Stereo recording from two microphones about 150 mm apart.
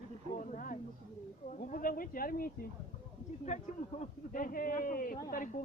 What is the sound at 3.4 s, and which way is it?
Speech, 50° left (ahead or behind).